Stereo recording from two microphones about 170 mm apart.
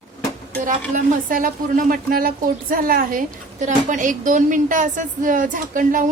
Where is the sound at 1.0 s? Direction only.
50° right (ahead or behind).